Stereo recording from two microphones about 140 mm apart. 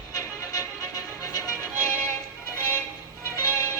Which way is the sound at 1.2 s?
25° left (ahead or behind).